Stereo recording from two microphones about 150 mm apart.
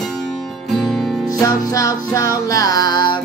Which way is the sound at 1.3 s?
25° left (ahead or behind).